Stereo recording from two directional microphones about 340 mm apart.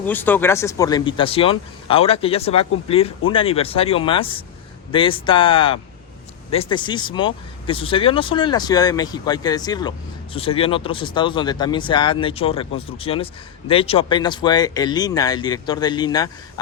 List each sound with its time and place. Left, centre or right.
0.0 s speech: centre